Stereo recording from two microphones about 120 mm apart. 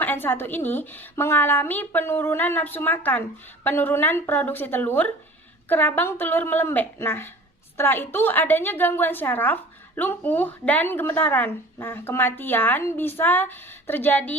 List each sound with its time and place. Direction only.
0.0 s a woman's voice: 15° left (ahead or behind)